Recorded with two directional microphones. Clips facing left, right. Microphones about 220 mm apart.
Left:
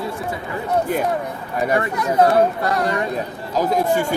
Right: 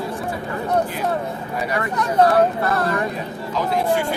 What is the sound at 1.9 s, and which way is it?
Speech, 10° left (ahead or behind).